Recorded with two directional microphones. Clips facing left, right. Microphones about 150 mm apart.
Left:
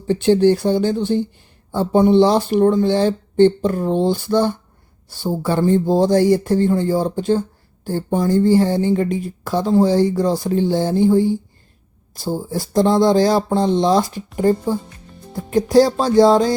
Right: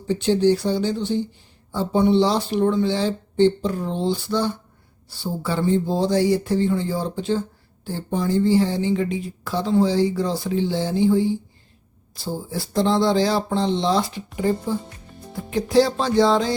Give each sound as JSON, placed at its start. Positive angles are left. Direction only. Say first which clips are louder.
{"t": 0.1, "sound": "speech", "louder": "left 4 dB", "side_deg": 55}